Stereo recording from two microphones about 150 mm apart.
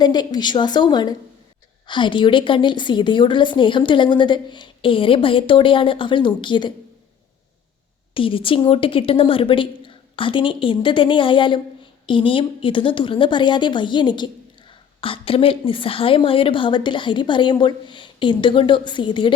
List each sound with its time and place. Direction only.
0.0 s a woman's voice: 30° left (ahead or behind)
8.1 s a woman's voice: 35° left (ahead or behind)